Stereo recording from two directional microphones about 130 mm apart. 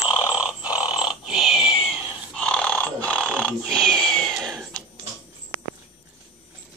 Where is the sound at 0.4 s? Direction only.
10° right (ahead or behind).